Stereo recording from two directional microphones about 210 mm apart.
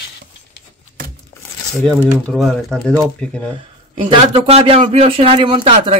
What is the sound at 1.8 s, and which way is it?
Speech, 5° left (ahead or behind).